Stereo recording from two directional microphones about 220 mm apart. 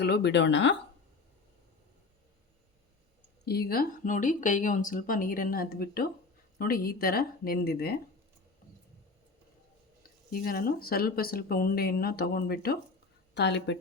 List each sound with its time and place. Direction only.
0.0 s speech: 50° left (ahead or behind)
3.4 s speech: 45° left (ahead or behind)
10.0 s speech: 40° left (ahead or behind)